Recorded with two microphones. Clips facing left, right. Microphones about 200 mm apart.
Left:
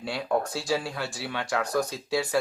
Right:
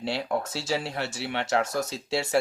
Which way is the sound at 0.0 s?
25° right (ahead or behind).